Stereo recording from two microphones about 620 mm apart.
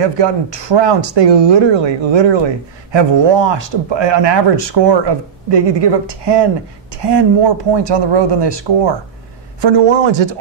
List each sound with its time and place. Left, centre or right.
0.0 s speech: right